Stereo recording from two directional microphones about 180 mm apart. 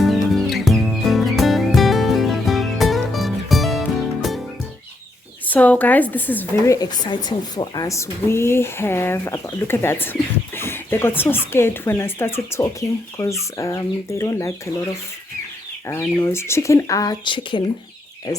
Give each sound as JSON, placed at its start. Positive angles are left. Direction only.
{"t": 0.0, "sound": "music", "side_deg": 0}
{"t": 5.5, "sound": "speech", "side_deg": 10}
{"t": 15.9, "sound": "speech", "side_deg": 15}